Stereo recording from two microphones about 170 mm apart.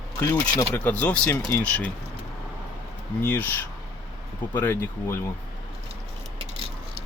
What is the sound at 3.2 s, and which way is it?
Speech, 10° left (ahead or behind).